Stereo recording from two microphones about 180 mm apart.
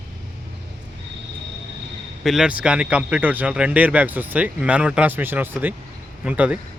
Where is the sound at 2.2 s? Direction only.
Centre (ahead or behind).